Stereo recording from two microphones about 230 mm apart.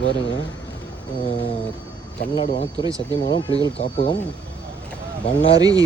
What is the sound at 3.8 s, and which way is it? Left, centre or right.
Speech, left.